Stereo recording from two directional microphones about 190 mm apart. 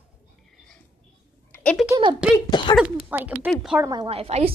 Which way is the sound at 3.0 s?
10° right (ahead or behind).